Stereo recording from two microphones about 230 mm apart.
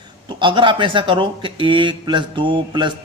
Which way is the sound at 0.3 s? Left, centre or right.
Right.